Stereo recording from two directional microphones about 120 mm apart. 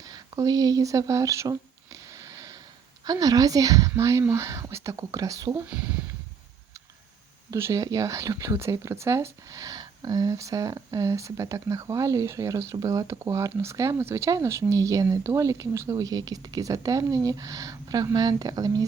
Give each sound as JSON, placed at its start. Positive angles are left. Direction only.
{"t": 0.1, "sound": "speech", "side_deg": -35}
{"t": 3.1, "sound": "speech", "side_deg": -30}
{"t": 5.6, "sound": "speech", "side_deg": -10}
{"t": 7.5, "sound": "speech", "side_deg": -25}